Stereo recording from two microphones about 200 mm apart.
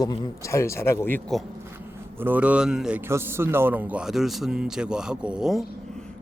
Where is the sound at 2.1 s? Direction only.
10° right (ahead or behind).